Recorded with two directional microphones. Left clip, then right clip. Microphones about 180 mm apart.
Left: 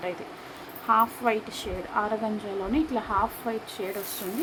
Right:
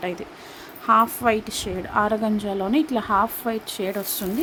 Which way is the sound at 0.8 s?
55° right (ahead or behind).